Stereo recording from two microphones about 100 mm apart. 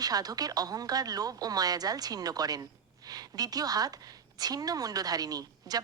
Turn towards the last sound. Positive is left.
turn(degrees=-40)  # may be behind; listen again after turning